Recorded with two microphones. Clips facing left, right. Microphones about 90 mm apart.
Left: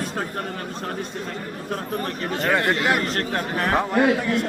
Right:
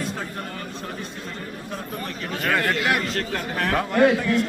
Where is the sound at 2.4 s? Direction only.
20° left (ahead or behind).